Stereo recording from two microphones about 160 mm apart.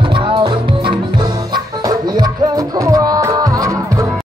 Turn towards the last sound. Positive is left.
turn(degrees=-20)  # may be behind; listen again after turning